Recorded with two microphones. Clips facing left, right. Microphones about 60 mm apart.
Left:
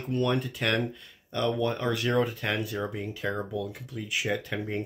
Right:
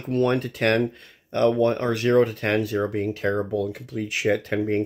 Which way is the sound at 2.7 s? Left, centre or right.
Right.